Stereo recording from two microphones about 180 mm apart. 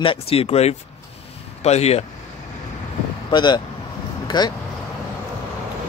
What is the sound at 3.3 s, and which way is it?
Speech, 25° left (ahead or behind).